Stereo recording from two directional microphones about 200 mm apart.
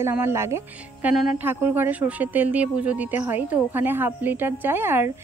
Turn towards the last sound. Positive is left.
turn(degrees=-10)  # may be behind; listen again after turning